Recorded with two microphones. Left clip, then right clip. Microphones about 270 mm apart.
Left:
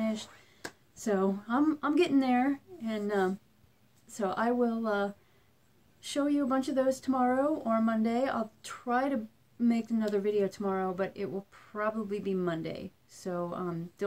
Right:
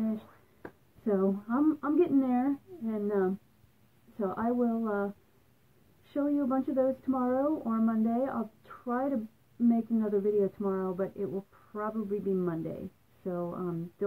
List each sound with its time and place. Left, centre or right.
0.0 s speech: centre
6.1 s speech: centre